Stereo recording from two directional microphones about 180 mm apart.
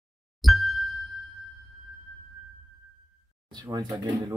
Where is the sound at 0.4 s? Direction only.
Centre (ahead or behind).